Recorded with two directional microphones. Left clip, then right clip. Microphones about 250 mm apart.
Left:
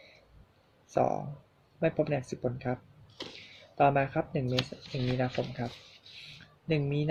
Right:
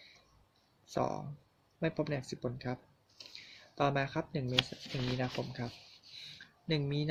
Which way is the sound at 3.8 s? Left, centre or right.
Centre.